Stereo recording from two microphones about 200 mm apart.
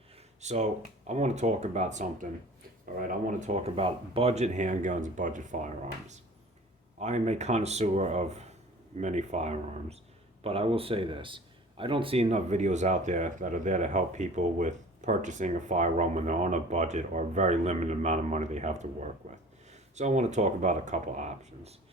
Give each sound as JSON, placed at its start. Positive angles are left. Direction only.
{"t": 0.4, "sound": "a man's voice", "side_deg": -35}